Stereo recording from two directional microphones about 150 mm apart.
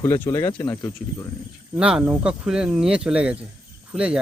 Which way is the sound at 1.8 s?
5° right (ahead or behind).